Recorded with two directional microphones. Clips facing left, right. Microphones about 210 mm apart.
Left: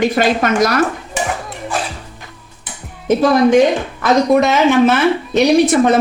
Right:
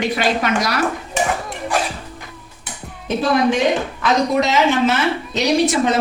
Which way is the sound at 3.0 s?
45° left (ahead or behind).